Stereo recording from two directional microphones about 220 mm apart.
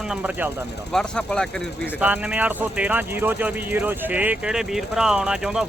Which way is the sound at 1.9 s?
5° right (ahead or behind).